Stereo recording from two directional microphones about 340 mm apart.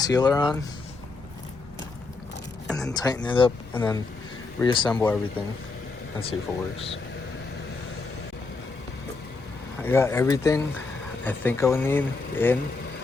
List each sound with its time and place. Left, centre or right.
0.0 s speech: centre
2.6 s speech: centre
9.8 s speech: centre